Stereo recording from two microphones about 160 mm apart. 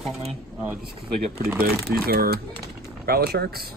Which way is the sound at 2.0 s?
70° right (ahead or behind).